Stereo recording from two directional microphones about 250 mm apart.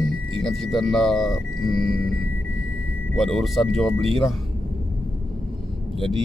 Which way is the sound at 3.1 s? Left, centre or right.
Centre.